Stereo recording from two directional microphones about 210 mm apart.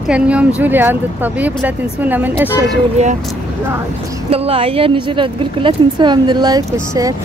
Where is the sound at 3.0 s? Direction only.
30° right (ahead or behind).